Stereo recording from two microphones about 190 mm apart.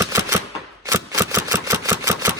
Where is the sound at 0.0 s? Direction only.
15° right (ahead or behind).